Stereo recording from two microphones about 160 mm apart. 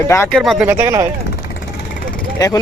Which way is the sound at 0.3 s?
Centre (ahead or behind).